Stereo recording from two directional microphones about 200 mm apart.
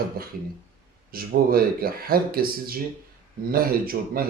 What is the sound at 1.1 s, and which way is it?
Speech, 45° right (ahead or behind).